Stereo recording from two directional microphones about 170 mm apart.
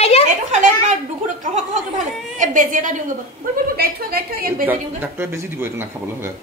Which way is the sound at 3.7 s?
60° right (ahead or behind).